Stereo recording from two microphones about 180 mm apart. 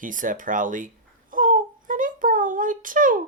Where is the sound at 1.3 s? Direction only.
45° right (ahead or behind).